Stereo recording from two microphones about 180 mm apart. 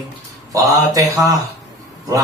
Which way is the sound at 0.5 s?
20° right (ahead or behind).